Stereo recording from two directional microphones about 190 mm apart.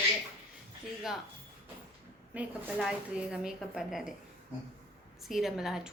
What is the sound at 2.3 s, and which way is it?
Speech, 5° right (ahead or behind).